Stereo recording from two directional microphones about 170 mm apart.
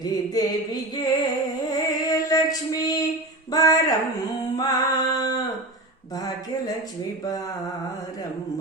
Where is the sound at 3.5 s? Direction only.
20° left (ahead or behind).